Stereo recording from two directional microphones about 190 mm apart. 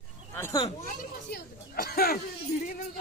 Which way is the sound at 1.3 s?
55° left (ahead or behind).